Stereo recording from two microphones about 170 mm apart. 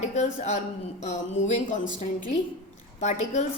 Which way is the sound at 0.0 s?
40° left (ahead or behind).